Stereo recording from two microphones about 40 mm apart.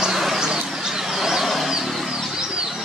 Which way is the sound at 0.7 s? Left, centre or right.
Centre.